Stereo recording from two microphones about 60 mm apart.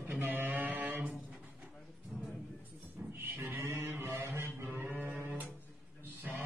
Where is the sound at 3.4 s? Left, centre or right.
Right.